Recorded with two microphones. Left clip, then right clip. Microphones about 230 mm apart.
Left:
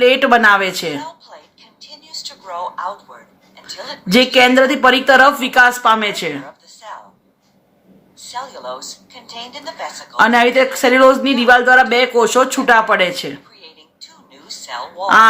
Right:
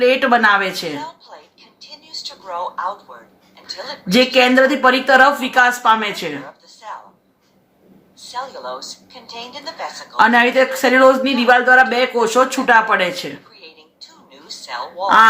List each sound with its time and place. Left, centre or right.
0.0 s speech: left
0.9 s a sound: centre
3.7 s a woman's voice: centre
4.1 s speech: centre
6.4 s a sound: centre
8.2 s a woman's voice: centre
10.2 s speech: centre
13.6 s a sound: centre
15.0 s speech: left